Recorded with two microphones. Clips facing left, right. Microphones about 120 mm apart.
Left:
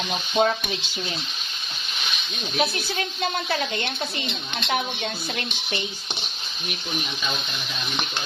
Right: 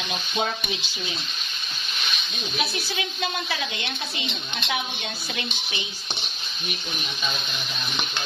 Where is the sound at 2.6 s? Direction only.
45° left (ahead or behind).